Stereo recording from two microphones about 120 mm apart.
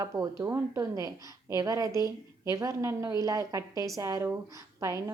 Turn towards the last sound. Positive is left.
turn(degrees=-25)  # may be behind; listen again after turning